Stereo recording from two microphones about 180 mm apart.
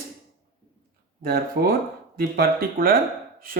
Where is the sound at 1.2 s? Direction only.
60° right (ahead or behind).